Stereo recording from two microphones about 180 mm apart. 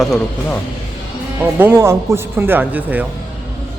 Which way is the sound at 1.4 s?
10° right (ahead or behind).